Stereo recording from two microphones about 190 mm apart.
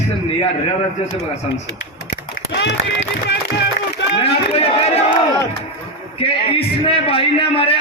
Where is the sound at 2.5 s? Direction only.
65° left (ahead or behind).